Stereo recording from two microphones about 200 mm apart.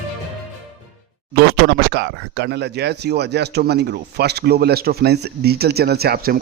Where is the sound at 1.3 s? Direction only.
55° right (ahead or behind).